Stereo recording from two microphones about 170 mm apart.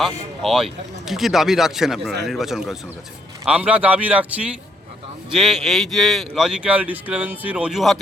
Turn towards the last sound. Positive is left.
turn(degrees=0)  # may be behind; listen again after turning